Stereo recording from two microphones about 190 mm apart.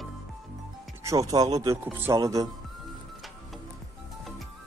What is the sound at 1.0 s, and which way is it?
Speech, 20° right (ahead or behind).